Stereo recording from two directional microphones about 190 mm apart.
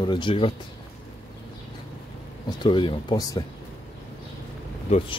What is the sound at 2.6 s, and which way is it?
Speech, 25° left (ahead or behind).